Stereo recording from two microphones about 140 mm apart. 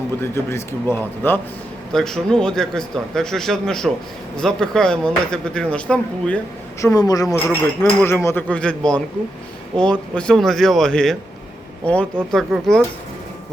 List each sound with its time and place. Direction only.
0.2 s speech: 20° left (ahead or behind)
1.9 s speech: 5° left (ahead or behind)
6.8 s a woman's voice: 25° left (ahead or behind); by 11.2 s 5° left (ahead or behind)
12.3 s speech: centre (ahead or behind)